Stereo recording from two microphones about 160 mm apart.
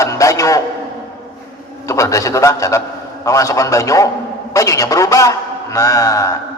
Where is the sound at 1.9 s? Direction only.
20° left (ahead or behind).